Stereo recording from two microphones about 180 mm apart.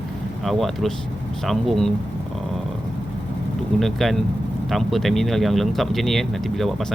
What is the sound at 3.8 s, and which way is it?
Speech, centre (ahead or behind).